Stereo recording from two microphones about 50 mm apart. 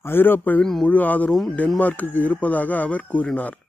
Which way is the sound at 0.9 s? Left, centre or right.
Left.